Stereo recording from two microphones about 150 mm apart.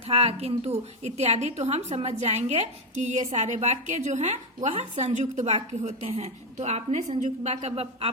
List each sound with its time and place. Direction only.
0.1 s a woman's voice: 40° right (ahead or behind)